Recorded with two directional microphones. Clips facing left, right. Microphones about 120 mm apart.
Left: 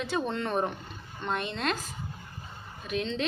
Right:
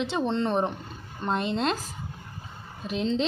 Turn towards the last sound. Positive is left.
turn(degrees=-30)  # may be behind; listen again after turning